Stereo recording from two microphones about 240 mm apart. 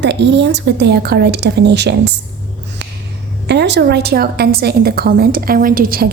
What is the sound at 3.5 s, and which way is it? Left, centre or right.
A woman's voice, right.